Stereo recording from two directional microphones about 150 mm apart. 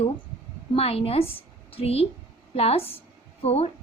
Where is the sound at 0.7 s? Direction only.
40° left (ahead or behind).